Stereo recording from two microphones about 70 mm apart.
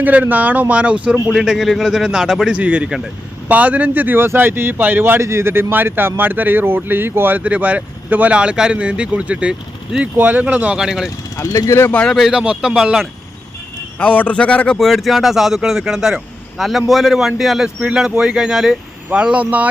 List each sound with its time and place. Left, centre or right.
0.0 s speech: right
1.1 s speech: centre
10.2 s speech: right
10.8 s speech: centre
11.3 s speech: left
11.9 s speech: centre
12.3 s speech: centre
14.0 s speech: left
14.8 s speech: centre